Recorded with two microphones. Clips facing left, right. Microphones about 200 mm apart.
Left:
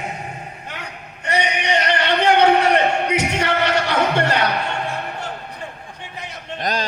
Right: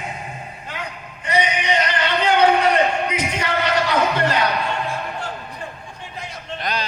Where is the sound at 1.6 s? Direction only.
65° left (ahead or behind).